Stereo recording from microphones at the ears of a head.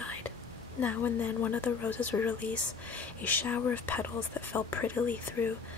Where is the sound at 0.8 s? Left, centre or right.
Left.